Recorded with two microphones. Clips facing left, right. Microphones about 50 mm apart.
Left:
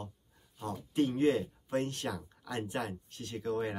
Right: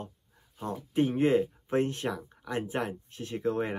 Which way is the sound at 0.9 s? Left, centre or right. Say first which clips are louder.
Right 4 dB; right.